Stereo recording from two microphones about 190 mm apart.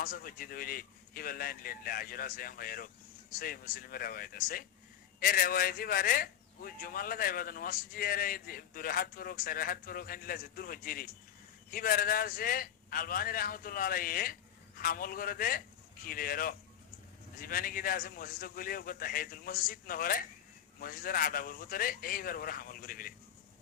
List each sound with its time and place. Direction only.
0.0 s a man's voice: 50° left (ahead or behind)